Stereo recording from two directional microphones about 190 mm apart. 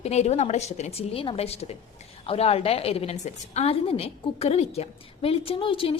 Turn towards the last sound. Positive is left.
turn(degrees=30)  # may be behind; listen again after turning